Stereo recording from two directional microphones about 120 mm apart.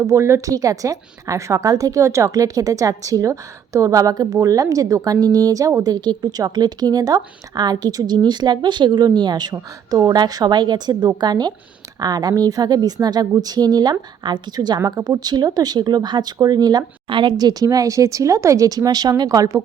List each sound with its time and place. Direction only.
0.0 s a woman's voice: 25° right (ahead or behind)